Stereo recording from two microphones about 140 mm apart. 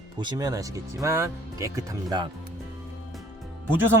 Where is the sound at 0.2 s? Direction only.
30° right (ahead or behind).